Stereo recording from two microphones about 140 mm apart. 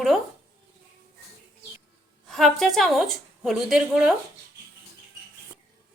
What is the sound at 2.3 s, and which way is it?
A woman's voice, centre (ahead or behind).